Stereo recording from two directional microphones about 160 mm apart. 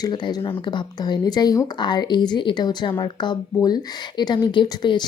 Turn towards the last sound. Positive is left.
turn(degrees=30)  # may be behind; listen again after turning